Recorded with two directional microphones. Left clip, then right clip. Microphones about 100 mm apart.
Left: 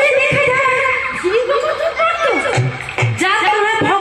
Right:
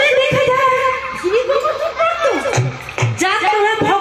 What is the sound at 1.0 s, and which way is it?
Chuckle, 20° left (ahead or behind).